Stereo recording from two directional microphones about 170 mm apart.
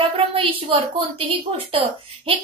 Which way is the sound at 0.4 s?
30° right (ahead or behind).